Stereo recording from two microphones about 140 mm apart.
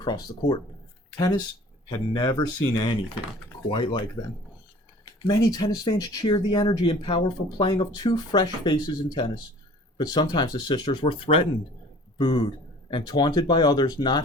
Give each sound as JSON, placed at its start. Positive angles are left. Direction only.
{"t": 0.0, "sound": "speech", "side_deg": 30}
{"t": 1.9, "sound": "speech", "side_deg": 30}